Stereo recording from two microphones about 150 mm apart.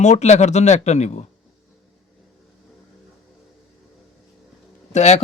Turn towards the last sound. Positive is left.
turn(degrees=50)  # may be behind; listen again after turning